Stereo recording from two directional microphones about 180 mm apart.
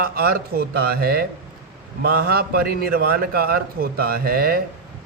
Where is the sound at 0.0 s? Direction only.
60° right (ahead or behind).